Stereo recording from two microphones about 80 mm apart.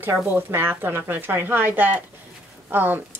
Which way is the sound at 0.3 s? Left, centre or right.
Right.